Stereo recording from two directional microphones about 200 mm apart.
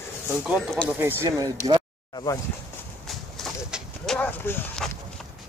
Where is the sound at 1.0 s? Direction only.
10° right (ahead or behind).